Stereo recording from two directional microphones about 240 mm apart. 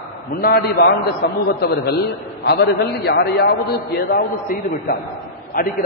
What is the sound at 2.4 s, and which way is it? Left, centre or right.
A man's voice, left.